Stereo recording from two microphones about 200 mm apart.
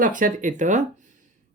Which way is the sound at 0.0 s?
40° right (ahead or behind).